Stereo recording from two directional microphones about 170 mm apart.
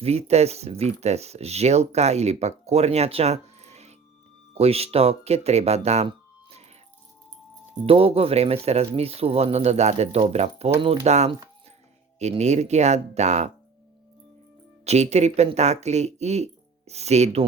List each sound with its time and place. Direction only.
0.0 s speech: 40° right (ahead or behind)
7.9 s speech: 35° right (ahead or behind)
14.8 s speech: 40° right (ahead or behind)